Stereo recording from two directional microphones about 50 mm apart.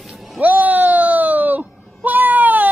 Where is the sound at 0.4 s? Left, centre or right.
Right.